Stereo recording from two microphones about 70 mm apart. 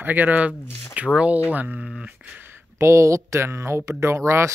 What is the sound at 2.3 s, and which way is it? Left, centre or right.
Speech, right.